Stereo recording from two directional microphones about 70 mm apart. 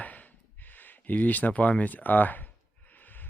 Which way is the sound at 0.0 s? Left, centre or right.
Left.